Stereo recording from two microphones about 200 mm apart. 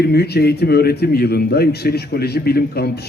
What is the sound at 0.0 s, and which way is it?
A man's voice, 55° left (ahead or behind).